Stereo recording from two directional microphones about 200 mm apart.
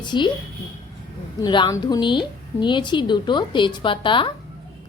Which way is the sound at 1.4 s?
20° left (ahead or behind).